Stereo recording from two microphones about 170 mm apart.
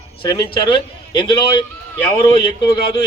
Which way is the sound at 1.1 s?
30° left (ahead or behind).